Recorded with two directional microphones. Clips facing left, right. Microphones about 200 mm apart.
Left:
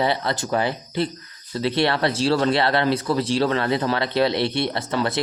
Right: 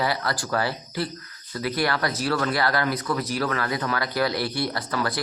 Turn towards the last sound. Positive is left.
turn(degrees=25)  # may be behind; listen again after turning